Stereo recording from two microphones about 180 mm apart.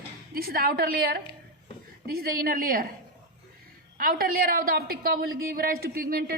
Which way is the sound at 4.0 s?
55° right (ahead or behind).